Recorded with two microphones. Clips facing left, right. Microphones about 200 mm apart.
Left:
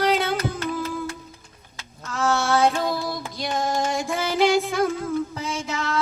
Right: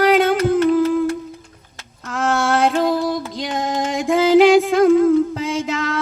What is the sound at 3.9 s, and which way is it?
Music, 90° right.